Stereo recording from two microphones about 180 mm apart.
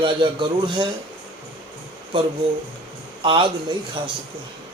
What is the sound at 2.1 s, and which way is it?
Speech, 25° right (ahead or behind).